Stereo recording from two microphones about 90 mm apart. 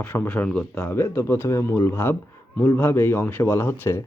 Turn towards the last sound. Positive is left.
turn(degrees=30)  # may be behind; listen again after turning